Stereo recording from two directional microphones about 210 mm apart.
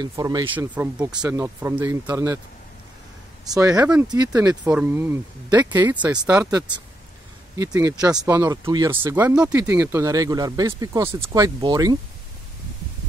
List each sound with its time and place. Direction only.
0.0 s speech: 15° right (ahead or behind)
3.4 s speech: 15° right (ahead or behind)
7.5 s speech: 15° right (ahead or behind)